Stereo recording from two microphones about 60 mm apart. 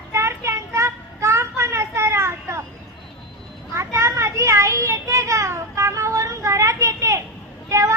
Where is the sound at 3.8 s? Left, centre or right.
Right.